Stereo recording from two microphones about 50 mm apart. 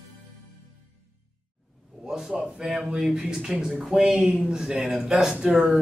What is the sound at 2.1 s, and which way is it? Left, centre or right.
Speech, centre.